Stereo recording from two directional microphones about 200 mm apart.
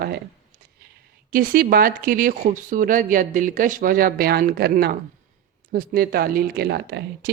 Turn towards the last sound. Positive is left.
turn(degrees=-60)  # may be behind; listen again after turning